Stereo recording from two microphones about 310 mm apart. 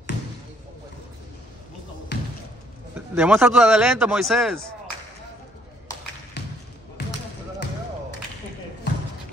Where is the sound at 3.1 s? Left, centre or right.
Centre.